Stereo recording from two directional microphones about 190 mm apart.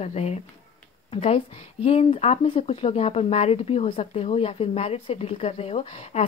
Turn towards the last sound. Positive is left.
turn(degrees=35)  # may be behind; listen again after turning